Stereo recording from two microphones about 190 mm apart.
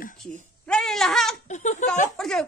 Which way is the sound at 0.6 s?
5° left (ahead or behind).